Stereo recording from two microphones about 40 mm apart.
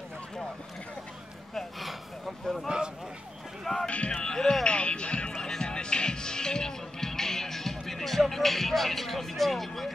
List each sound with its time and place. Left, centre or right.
1.5 s speech: centre
3.8 s speech: left
4.6 s music: left; by 9.8 s centre